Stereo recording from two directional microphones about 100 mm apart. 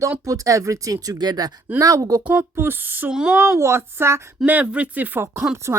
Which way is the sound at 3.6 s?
25° right (ahead or behind).